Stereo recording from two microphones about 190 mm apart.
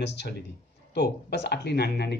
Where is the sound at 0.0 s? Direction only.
65° left (ahead or behind).